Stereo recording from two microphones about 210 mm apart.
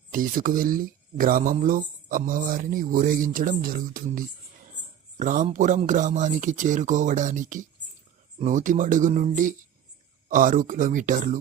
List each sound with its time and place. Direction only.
0.1 s speech: 40° right (ahead or behind)
5.2 s speech: 35° right (ahead or behind)